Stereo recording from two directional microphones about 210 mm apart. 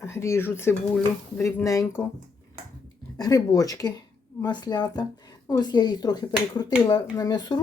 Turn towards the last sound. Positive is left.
turn(degrees=20)  # may be behind; listen again after turning